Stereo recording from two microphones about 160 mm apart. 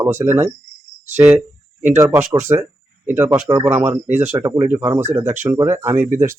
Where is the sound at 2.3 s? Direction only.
20° right (ahead or behind).